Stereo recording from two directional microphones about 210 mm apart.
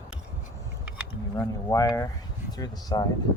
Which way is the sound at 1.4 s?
15° left (ahead or behind).